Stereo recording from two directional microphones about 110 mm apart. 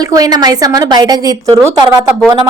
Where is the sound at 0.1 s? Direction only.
35° right (ahead or behind).